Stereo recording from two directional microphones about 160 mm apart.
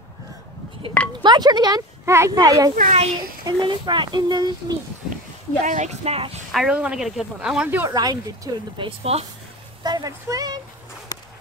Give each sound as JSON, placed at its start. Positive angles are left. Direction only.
{"t": 1.2, "sound": "speech", "side_deg": -25}
{"t": 2.7, "sound": "speech", "side_deg": -50}
{"t": 3.4, "sound": "speech", "side_deg": -25}
{"t": 5.6, "sound": "speech", "side_deg": -50}
{"t": 6.5, "sound": "speech", "side_deg": -5}
{"t": 7.9, "sound": "speech", "side_deg": -25}
{"t": 8.7, "sound": "speech", "side_deg": -35}
{"t": 9.8, "sound": "speech", "side_deg": -25}